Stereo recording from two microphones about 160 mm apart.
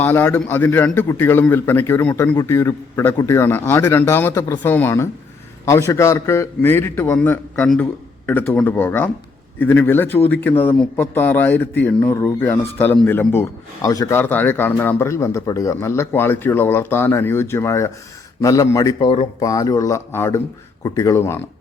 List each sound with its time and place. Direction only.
0.0 s speech: 15° left (ahead or behind)